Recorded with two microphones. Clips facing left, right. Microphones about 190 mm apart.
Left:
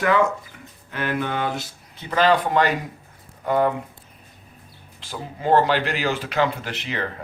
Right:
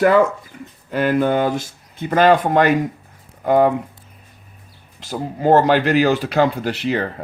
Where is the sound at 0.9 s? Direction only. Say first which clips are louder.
Right 9 dB; 40° right (ahead or behind).